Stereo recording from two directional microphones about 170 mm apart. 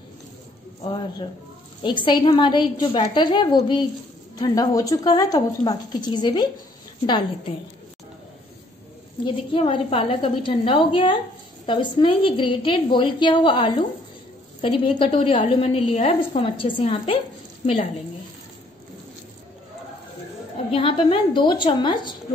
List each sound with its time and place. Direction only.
1.8 s a woman's voice: 30° left (ahead or behind)
9.2 s a woman's voice: 30° left (ahead or behind)
20.7 s a woman's voice: 30° left (ahead or behind)